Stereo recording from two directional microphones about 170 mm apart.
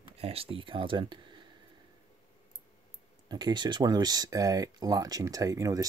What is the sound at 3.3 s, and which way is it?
Speech, 25° right (ahead or behind).